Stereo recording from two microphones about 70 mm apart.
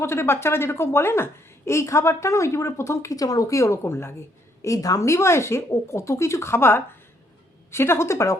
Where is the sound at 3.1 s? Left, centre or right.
Left.